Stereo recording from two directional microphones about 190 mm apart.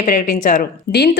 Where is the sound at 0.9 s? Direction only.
55° left (ahead or behind).